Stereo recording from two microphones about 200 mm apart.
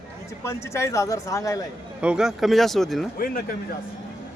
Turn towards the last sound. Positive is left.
turn(degrees=45)  # may be behind; listen again after turning